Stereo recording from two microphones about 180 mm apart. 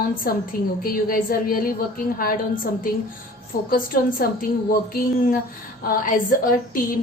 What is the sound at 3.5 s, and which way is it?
Speech, 50° left (ahead or behind).